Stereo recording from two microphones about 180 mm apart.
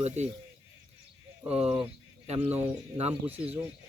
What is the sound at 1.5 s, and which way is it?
Speech, 5° right (ahead or behind).